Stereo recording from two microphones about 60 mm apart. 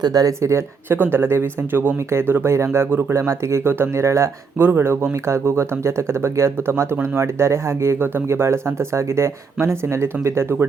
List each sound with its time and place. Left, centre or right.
0.1 s speech: right
0.9 s speech: right